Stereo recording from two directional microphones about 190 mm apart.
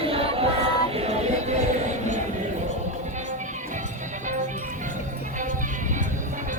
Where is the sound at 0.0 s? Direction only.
30° right (ahead or behind).